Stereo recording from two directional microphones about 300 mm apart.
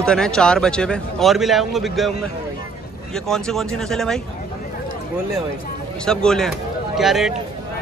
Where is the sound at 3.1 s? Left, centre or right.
Centre.